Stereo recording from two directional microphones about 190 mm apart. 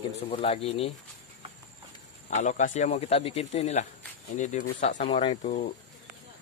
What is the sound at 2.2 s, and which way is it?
Speech, 40° left (ahead or behind).